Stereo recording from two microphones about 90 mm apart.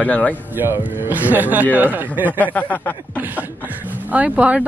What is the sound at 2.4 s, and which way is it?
Speech, 20° left (ahead or behind).